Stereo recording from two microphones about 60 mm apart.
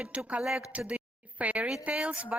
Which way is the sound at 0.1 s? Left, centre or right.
Right.